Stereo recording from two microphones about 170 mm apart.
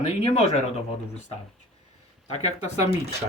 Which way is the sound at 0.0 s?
40° left (ahead or behind).